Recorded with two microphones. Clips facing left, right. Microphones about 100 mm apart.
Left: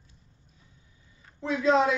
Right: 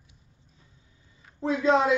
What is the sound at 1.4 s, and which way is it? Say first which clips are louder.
Speech: right 1 dB; 30° right (ahead or behind).